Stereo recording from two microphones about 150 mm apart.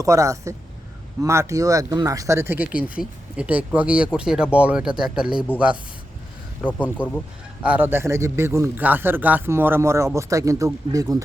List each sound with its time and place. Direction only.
0.0 s speech: 20° right (ahead or behind)
6.7 s speech: 10° left (ahead or behind)
7.6 s speech: 10° right (ahead or behind)